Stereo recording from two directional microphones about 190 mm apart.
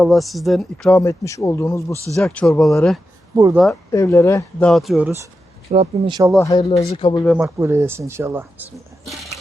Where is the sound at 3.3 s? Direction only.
15° right (ahead or behind).